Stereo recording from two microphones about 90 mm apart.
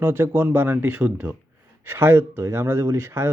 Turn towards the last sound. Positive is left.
turn(degrees=-30)  # may be behind; listen again after turning